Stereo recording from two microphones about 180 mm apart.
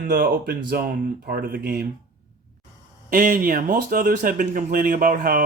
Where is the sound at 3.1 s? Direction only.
50° right (ahead or behind).